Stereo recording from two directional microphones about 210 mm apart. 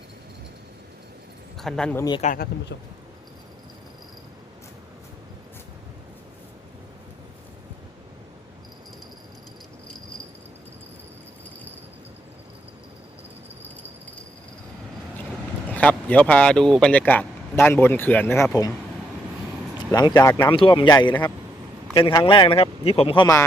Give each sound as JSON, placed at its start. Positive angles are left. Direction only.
{"t": 1.5, "sound": "speech", "side_deg": 0}
{"t": 2.2, "sound": "speech", "side_deg": 45}
{"t": 15.7, "sound": "speech", "side_deg": 5}
{"t": 19.9, "sound": "speech", "side_deg": 20}